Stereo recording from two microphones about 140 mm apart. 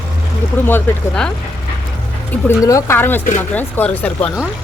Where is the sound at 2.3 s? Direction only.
20° left (ahead or behind).